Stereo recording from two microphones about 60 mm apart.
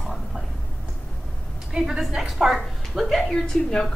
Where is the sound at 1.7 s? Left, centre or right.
Centre.